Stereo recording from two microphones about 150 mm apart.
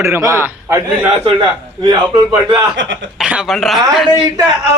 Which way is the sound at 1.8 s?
30° right (ahead or behind).